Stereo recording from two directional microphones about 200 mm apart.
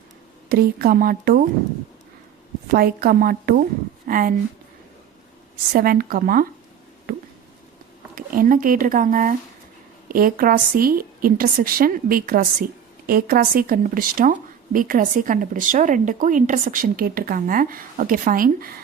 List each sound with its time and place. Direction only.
0.4 s a woman's voice: 50° right (ahead or behind)
2.7 s a woman's voice: 50° right (ahead or behind)
5.7 s a woman's voice: 45° right (ahead or behind)
7.1 s a sound: 45° right (ahead or behind)
8.1 s a woman's voice: 45° right (ahead or behind)